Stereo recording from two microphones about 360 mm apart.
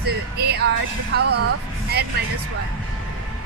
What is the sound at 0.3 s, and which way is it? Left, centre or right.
Speech, right.